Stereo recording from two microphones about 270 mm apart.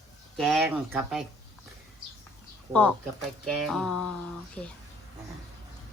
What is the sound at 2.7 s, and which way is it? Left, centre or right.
A woman's voice, centre.